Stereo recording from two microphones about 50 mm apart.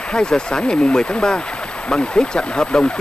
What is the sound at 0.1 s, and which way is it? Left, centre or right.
Speech, centre.